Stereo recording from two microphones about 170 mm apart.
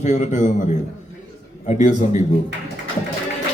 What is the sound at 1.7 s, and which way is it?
Speech, 45° left (ahead or behind).